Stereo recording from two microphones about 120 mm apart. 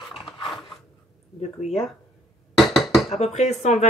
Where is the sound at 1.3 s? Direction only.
65° left (ahead or behind).